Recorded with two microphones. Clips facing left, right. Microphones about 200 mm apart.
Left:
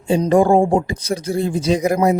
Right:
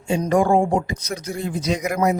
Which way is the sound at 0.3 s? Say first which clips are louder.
Left 4 dB; 30° left (ahead or behind).